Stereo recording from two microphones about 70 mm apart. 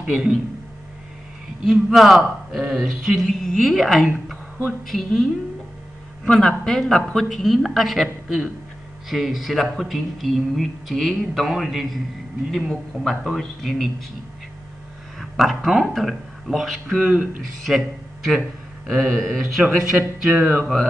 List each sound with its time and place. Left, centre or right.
0.0 s speech: centre
1.6 s speech: centre
15.1 s speech: centre
17.0 s speech: right
17.6 s speech: centre
19.9 s speech: centre